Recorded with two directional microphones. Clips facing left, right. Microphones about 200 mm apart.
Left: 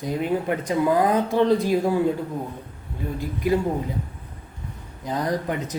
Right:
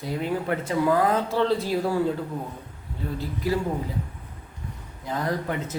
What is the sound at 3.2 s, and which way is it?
Speech, 20° left (ahead or behind).